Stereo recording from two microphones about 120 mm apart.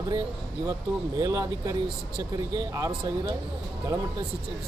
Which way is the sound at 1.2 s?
25° right (ahead or behind).